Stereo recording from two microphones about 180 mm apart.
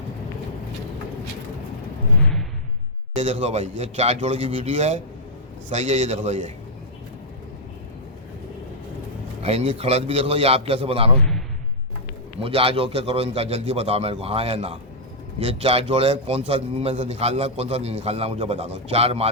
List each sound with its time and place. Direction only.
3.2 s a man's voice: 40° right (ahead or behind)
9.4 s a man's voice: 35° right (ahead or behind)
12.4 s a man's voice: 30° right (ahead or behind)